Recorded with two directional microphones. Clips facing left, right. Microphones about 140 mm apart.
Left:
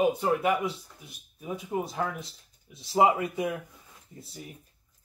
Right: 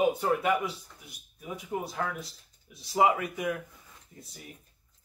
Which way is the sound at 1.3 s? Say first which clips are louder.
Left 3 dB; 25° left (ahead or behind).